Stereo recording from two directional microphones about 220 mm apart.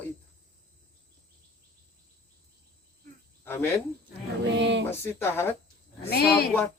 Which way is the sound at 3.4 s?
10° left (ahead or behind).